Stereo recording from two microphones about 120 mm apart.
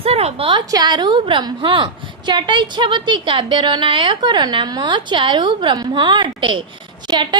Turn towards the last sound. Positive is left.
turn(degrees=-35)  # may be behind; listen again after turning